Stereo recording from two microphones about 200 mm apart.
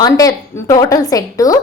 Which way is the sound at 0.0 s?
15° left (ahead or behind).